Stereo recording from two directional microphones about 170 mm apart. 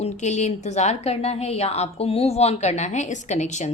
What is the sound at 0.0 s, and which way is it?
A woman's voice, 45° left (ahead or behind).